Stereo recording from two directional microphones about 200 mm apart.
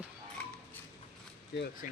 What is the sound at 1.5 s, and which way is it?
Speech, 50° left (ahead or behind).